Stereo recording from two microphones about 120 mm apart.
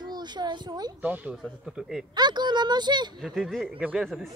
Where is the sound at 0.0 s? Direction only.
35° right (ahead or behind).